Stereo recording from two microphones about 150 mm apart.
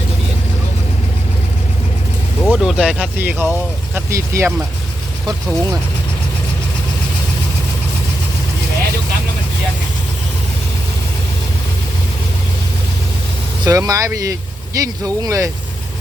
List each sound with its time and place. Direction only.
2.4 s speech: centre (ahead or behind); by 4.5 s 20° right (ahead or behind)
13.7 s speech: 20° right (ahead or behind)